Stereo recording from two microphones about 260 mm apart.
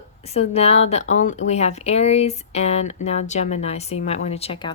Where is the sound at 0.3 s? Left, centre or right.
Left.